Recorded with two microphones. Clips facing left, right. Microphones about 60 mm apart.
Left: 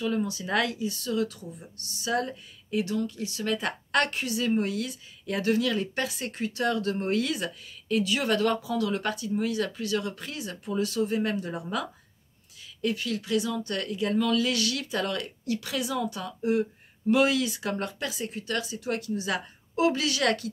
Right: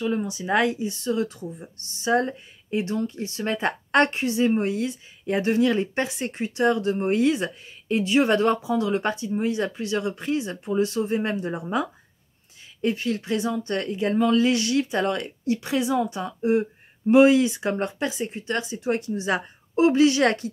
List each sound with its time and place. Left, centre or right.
0.0 s speech: right